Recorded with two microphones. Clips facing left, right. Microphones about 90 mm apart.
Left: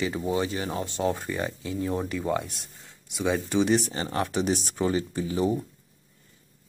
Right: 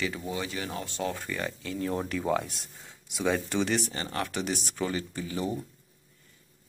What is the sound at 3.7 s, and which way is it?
Speech, 20° left (ahead or behind).